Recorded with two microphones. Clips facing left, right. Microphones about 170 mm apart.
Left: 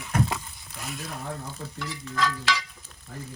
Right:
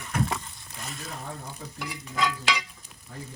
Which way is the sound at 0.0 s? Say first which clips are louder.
Left 2 dB; 5° left (ahead or behind).